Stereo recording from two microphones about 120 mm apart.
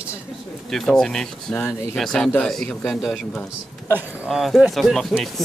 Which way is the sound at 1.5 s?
20° left (ahead or behind).